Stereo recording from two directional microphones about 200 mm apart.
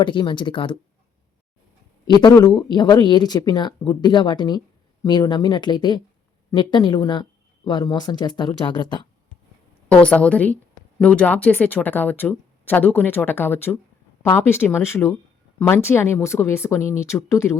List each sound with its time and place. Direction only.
0.0 s speech: 25° left (ahead or behind)
2.1 s speech: 20° left (ahead or behind)
9.9 s speech: 5° left (ahead or behind)